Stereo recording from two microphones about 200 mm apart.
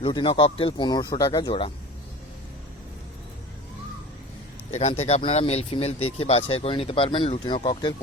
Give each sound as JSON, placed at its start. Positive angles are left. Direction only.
{"t": 0.0, "sound": "speech", "side_deg": 25}
{"t": 4.7, "sound": "speech", "side_deg": 35}